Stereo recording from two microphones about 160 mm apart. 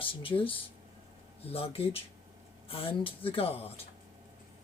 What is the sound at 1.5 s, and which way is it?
Speech, 35° left (ahead or behind).